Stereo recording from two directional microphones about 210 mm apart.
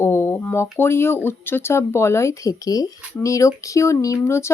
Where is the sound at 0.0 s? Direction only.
10° left (ahead or behind).